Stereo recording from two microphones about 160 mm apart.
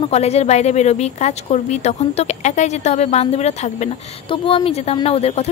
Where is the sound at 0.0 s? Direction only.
40° left (ahead or behind).